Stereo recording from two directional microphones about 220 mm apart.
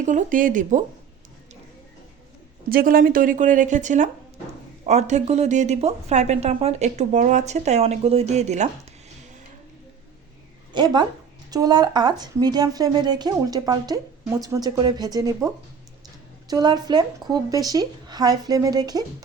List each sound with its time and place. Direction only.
0.0 s speech: 35° right (ahead or behind)
2.6 s speech: 40° right (ahead or behind)
10.7 s a woman's voice: 20° right (ahead or behind)